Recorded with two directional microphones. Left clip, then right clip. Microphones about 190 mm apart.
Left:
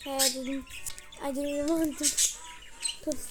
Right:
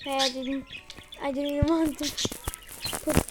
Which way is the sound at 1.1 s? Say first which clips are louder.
Right 3 dB; centre (ahead or behind).